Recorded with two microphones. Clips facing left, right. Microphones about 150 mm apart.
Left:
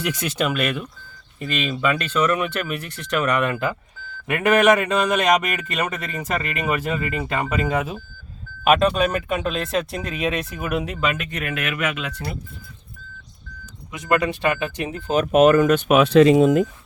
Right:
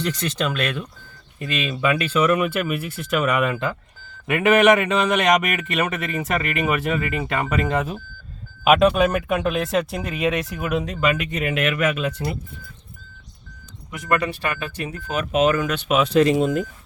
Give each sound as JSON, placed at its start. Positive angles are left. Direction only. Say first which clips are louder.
{"t": 0.0, "sound": "a man's voice", "louder": "left 1 dB", "side_deg": 10}
{"t": 13.9, "sound": "speech", "louder": "left 2 dB", "side_deg": 20}
{"t": 15.1, "sound": "speech", "louder": "left 5 dB", "side_deg": 40}